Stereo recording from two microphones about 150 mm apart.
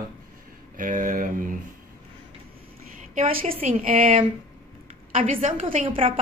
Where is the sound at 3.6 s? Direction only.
65° right (ahead or behind).